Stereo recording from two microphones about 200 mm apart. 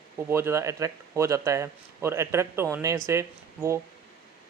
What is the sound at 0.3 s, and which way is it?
Speech, 10° right (ahead or behind).